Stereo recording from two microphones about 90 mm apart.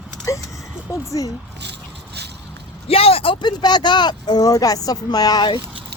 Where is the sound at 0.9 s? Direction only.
40° left (ahead or behind).